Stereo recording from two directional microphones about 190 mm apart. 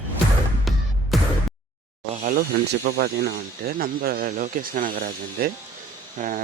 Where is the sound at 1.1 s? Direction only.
Centre (ahead or behind).